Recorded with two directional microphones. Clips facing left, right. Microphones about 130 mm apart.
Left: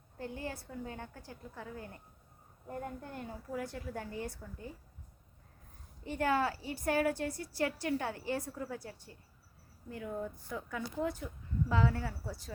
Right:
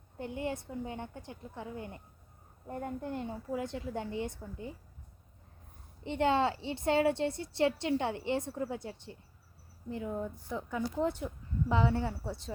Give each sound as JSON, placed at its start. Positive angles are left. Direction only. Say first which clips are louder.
{"t": 0.2, "sound": "a woman's voice", "louder": "right 5 dB", "side_deg": -20}
{"t": 6.1, "sound": "a woman's voice", "louder": "right 3 dB", "side_deg": -25}